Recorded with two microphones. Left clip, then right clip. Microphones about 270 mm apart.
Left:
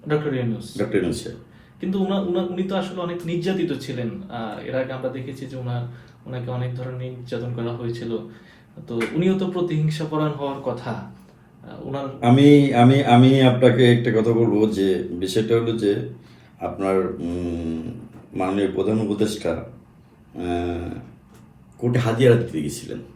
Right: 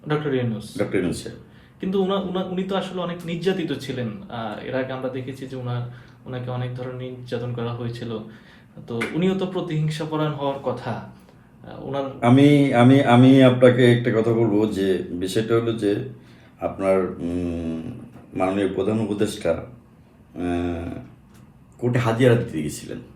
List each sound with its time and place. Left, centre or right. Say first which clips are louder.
0.1 s a man's voice: even; right
1.8 s a man's voice: right 2 dB; right
12.2 s speech: left 2 dB; centre
21.8 s speech: even; centre